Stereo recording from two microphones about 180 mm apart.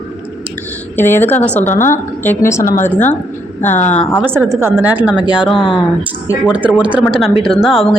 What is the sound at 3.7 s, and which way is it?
Speech, 40° left (ahead or behind).